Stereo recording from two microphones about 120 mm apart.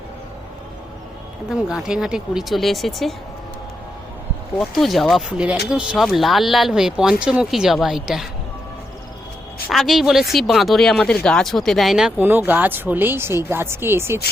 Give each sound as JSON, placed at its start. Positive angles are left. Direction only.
{"t": 1.5, "sound": "speech", "side_deg": -5}
{"t": 4.6, "sound": "speech", "side_deg": 0}
{"t": 9.6, "sound": "speech", "side_deg": 0}
{"t": 12.1, "sound": "speech", "side_deg": -15}